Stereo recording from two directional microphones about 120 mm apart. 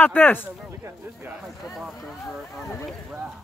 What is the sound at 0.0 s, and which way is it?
Speech, 15° left (ahead or behind).